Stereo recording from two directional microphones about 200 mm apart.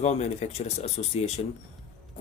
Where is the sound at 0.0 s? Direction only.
35° left (ahead or behind).